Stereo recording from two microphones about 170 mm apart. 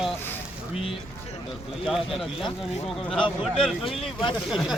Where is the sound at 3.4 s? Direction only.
Centre (ahead or behind).